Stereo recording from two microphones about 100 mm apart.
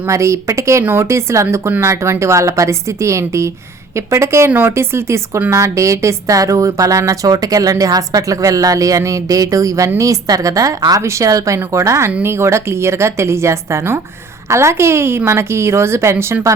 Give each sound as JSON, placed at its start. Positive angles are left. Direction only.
{"t": 0.1, "sound": "a woman's voice", "side_deg": -30}